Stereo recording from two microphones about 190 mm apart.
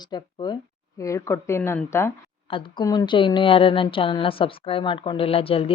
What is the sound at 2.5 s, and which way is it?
A woman's voice, 25° left (ahead or behind).